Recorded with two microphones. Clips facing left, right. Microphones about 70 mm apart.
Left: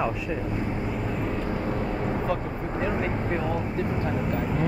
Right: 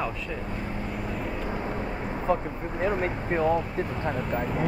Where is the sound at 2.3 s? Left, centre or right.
Right.